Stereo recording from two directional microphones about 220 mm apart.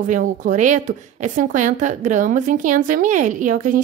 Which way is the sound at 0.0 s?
35° right (ahead or behind).